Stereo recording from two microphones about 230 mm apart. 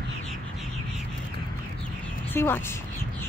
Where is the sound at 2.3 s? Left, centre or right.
Centre.